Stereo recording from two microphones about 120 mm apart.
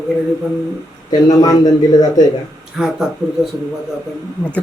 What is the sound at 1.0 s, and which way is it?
A man's voice, 30° left (ahead or behind).